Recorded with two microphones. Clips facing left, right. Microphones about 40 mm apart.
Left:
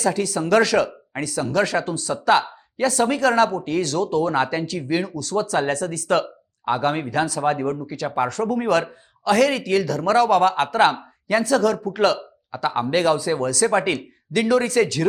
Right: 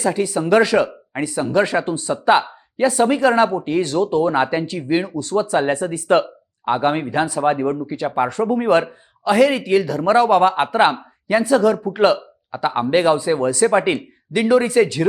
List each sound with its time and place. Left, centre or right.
0.0 s a man's voice: centre